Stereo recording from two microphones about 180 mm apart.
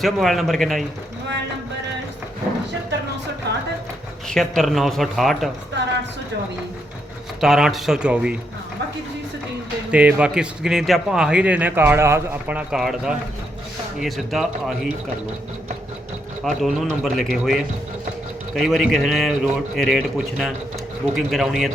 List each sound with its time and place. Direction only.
0.0 s speech: centre (ahead or behind)
3.5 s music: 65° right (ahead or behind)
4.3 s speech: centre (ahead or behind)
7.4 s speech: centre (ahead or behind)
9.9 s speech: 5° right (ahead or behind)
16.4 s speech: centre (ahead or behind)